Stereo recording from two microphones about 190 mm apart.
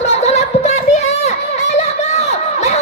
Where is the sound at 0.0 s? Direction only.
35° left (ahead or behind).